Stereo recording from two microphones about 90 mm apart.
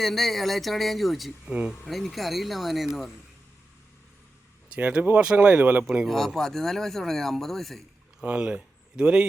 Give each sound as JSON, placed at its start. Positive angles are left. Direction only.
{"t": 0.0, "sound": "speech", "side_deg": 0}
{"t": 4.7, "sound": "speech", "side_deg": -15}
{"t": 6.1, "sound": "speech", "side_deg": 5}
{"t": 8.2, "sound": "speech", "side_deg": -10}